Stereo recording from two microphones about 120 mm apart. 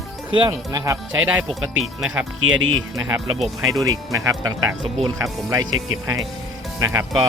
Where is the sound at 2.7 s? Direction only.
30° right (ahead or behind).